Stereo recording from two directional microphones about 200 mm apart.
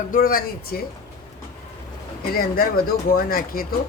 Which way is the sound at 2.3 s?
50° left (ahead or behind).